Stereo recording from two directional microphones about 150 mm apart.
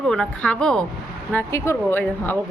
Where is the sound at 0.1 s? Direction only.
5° left (ahead or behind).